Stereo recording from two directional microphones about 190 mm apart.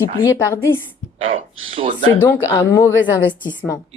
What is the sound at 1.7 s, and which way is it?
Speech, 30° right (ahead or behind).